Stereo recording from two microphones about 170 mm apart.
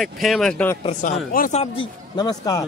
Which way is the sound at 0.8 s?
50° left (ahead or behind).